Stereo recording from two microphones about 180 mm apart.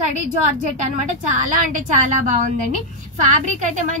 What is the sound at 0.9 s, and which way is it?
A woman's voice, 40° right (ahead or behind).